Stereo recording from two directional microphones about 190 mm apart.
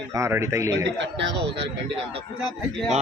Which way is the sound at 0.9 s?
65° right (ahead or behind).